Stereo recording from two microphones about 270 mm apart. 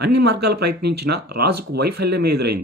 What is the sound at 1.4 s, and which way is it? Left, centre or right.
Speech, right.